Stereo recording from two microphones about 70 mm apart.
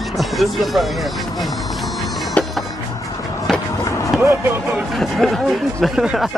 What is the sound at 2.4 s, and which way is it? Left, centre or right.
Music, centre.